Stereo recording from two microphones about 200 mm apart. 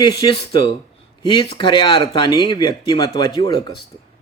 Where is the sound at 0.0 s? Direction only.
25° left (ahead or behind).